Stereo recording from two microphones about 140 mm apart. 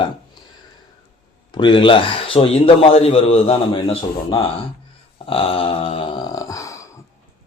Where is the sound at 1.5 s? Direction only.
35° left (ahead or behind).